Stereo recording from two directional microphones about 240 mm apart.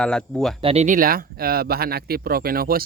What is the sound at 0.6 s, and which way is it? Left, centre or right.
Speech, right.